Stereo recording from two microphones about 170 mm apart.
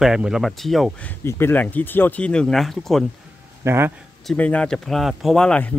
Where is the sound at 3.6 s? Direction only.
15° right (ahead or behind).